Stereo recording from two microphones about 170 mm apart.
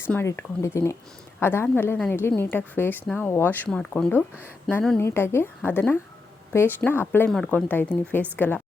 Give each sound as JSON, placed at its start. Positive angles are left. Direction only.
{"t": 0.0, "sound": "a woman's voice", "side_deg": 15}